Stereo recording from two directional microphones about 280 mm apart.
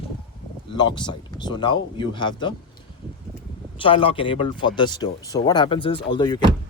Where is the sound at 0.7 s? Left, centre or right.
Centre.